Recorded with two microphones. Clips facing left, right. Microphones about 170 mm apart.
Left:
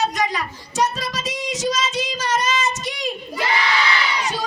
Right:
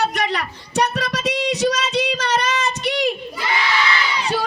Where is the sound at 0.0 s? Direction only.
65° right (ahead or behind).